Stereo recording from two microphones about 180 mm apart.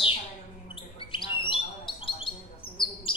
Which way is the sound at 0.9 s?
30° left (ahead or behind).